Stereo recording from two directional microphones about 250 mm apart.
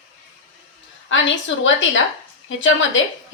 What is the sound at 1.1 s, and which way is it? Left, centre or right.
A woman's voice, left.